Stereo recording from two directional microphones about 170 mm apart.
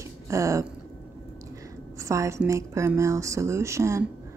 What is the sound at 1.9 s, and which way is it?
Speech, 20° right (ahead or behind).